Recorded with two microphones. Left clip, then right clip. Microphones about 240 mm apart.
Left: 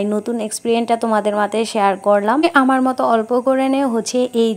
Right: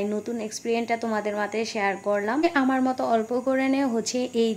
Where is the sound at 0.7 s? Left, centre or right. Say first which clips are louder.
Left 9 dB; left.